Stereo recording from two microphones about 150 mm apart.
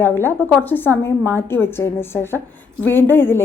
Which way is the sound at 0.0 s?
15° left (ahead or behind).